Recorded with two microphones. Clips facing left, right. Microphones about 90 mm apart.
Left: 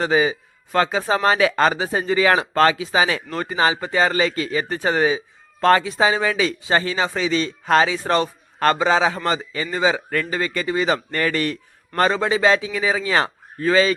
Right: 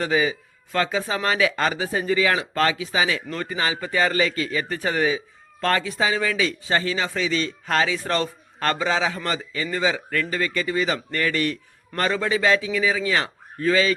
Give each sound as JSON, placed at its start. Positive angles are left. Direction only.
{"t": 0.0, "sound": "speech", "side_deg": 30}
{"t": 3.2, "sound": "speech", "side_deg": 25}